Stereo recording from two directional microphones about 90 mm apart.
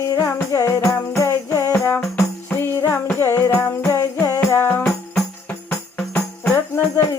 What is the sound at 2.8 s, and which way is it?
Music, 25° left (ahead or behind).